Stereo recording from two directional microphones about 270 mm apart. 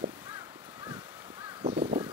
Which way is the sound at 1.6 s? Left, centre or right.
Centre.